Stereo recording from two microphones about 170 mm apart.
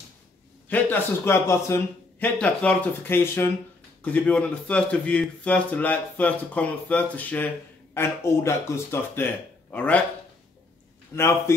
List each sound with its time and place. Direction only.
0.7 s a man's voice: 10° left (ahead or behind)
11.1 s a man's voice: 15° left (ahead or behind)